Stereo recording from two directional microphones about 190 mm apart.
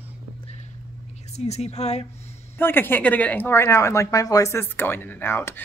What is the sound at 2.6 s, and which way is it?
Speech, 10° left (ahead or behind).